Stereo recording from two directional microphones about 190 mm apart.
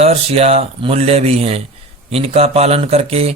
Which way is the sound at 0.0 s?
35° right (ahead or behind).